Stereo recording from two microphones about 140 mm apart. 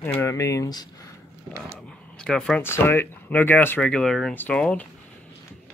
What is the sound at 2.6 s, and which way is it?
Speech, 15° left (ahead or behind).